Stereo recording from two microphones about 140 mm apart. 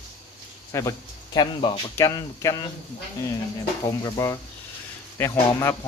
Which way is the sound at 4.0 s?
25° left (ahead or behind).